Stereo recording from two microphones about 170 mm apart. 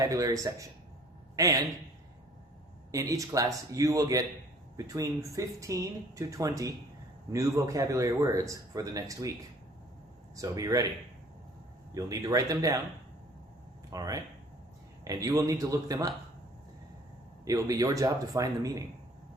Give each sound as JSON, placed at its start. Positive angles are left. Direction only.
{"t": 0.0, "sound": "speech", "side_deg": -20}
{"t": 2.9, "sound": "speech", "side_deg": -20}
{"t": 10.3, "sound": "speech", "side_deg": -20}
{"t": 11.9, "sound": "speech", "side_deg": -20}
{"t": 13.9, "sound": "speech", "side_deg": -20}
{"t": 17.4, "sound": "speech", "side_deg": -20}